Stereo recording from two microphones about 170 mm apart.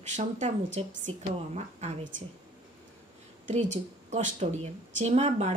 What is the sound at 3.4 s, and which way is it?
A woman's voice, 45° right (ahead or behind).